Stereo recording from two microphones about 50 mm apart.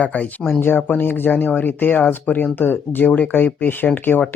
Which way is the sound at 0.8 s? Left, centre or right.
Left.